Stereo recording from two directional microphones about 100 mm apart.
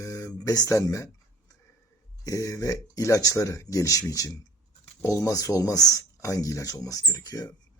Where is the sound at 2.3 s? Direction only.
35° left (ahead or behind).